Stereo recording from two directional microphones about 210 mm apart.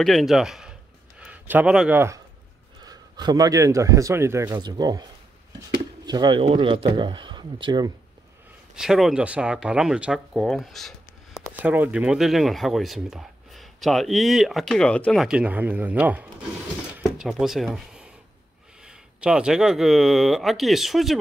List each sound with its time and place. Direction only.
0.0 s speech: centre (ahead or behind); by 5.0 s 20° right (ahead or behind)
6.0 s speech: 20° right (ahead or behind)
8.7 s speech: centre (ahead or behind)
16.9 s a sound: centre (ahead or behind)
18.9 s speech: 5° right (ahead or behind)